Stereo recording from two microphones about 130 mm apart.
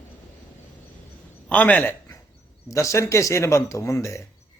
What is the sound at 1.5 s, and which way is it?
Speech, 10° left (ahead or behind).